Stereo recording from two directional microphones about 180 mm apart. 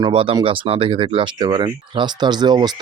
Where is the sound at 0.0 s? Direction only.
30° right (ahead or behind).